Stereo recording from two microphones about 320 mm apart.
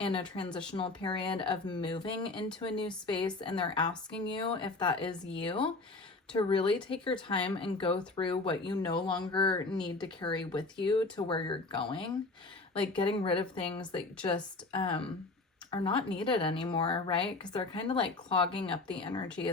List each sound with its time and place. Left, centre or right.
0.0 s speech: centre